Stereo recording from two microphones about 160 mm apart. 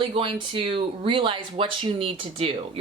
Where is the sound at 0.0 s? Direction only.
30° right (ahead or behind).